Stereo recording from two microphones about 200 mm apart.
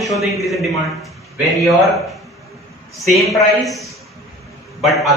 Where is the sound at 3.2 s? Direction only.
Centre (ahead or behind).